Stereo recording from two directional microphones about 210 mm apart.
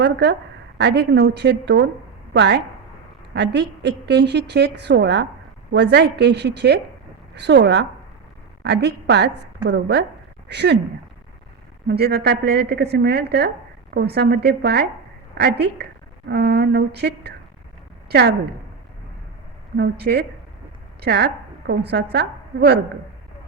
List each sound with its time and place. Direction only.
0.0 s a woman's voice: 55° right (ahead or behind)
11.9 s a woman's voice: 50° right (ahead or behind)
19.7 s a woman's voice: 50° right (ahead or behind)